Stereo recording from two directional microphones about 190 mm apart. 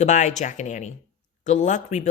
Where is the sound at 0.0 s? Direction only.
40° left (ahead or behind).